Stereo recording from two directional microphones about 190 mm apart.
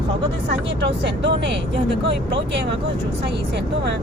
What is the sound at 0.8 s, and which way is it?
Speech, 65° right (ahead or behind).